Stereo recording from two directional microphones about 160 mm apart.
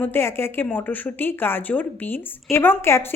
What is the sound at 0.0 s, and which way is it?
Speech, 15° left (ahead or behind).